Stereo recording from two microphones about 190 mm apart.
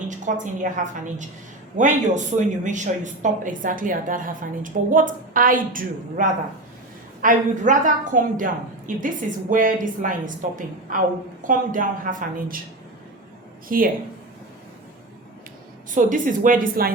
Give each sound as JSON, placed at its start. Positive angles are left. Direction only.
{"t": 0.1, "sound": "a woman's voice", "side_deg": -40}
{"t": 13.7, "sound": "speech", "side_deg": -50}
{"t": 16.0, "sound": "speech", "side_deg": -45}